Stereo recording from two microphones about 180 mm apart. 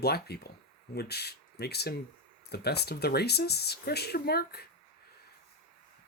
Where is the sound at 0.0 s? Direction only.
60° left (ahead or behind).